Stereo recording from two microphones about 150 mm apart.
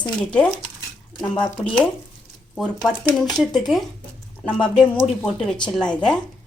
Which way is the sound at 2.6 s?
5° left (ahead or behind).